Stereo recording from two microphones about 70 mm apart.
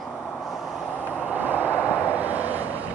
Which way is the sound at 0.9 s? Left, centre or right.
Right.